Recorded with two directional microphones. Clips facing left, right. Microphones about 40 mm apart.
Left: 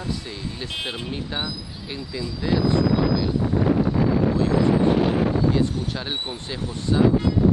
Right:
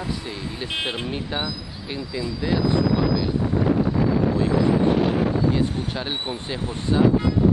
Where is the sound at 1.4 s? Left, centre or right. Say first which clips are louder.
Right 1 dB; centre.